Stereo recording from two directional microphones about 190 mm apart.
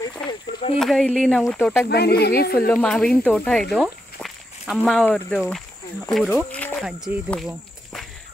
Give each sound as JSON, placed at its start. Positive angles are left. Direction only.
{"t": 0.1, "sound": "a sound", "side_deg": 20}
{"t": 0.7, "sound": "speech", "side_deg": 0}
{"t": 1.9, "sound": "speech", "side_deg": 60}
{"t": 2.5, "sound": "speech", "side_deg": 5}
{"t": 7.2, "sound": "cricket", "side_deg": 0}